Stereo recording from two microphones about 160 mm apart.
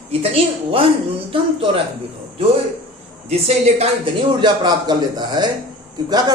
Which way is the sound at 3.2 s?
40° right (ahead or behind).